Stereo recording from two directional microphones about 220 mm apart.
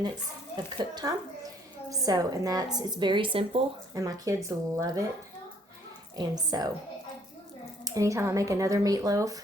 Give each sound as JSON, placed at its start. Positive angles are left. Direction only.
{"t": 0.5, "sound": "a woman's voice", "side_deg": -20}
{"t": 6.1, "sound": "a woman's voice", "side_deg": -20}
{"t": 7.9, "sound": "a woman's voice", "side_deg": -15}